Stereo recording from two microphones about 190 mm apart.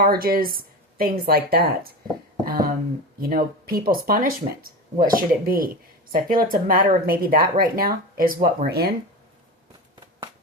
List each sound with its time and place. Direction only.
0.0 s speech: 50° right (ahead or behind)
2.4 s a sound: 50° right (ahead or behind)
3.2 s speech: 50° right (ahead or behind)